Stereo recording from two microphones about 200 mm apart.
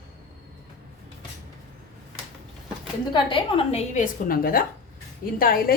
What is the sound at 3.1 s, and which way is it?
A woman's voice, 25° left (ahead or behind).